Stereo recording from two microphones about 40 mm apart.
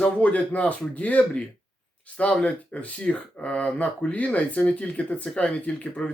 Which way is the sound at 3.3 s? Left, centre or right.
Left.